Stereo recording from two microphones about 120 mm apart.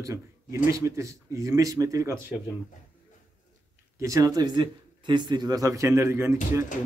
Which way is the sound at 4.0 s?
25° right (ahead or behind).